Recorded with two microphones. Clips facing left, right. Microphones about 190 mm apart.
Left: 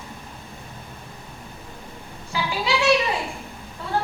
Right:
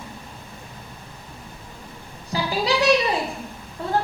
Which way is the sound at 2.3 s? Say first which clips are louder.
Right 3 dB; 35° right (ahead or behind).